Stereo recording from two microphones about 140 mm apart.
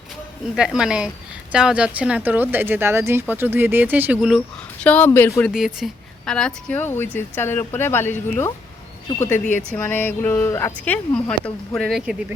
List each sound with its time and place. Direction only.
0.5 s speech: 5° right (ahead or behind)
4.8 s speech: 10° left (ahead or behind)
5.5 s speech: 5° right (ahead or behind)